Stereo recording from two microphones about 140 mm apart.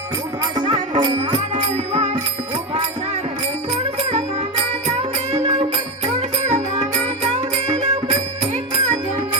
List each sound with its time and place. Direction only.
0.9 s music: 35° right (ahead or behind)
1.7 s music: 50° right (ahead or behind)
4.9 s music: 50° right (ahead or behind)